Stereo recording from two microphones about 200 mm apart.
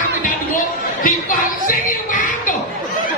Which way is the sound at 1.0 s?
45° left (ahead or behind).